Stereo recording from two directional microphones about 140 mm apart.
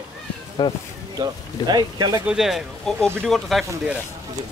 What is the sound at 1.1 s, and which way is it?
Speech, 30° right (ahead or behind).